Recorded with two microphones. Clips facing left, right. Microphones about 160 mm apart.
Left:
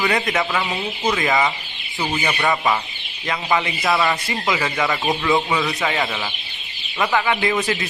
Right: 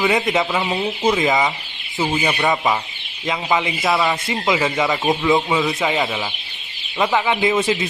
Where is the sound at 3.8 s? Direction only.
Centre (ahead or behind).